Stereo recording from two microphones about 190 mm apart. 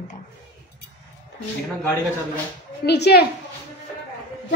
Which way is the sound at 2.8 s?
60° left (ahead or behind).